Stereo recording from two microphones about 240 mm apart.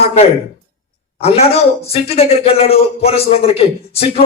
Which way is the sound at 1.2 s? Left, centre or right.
Left.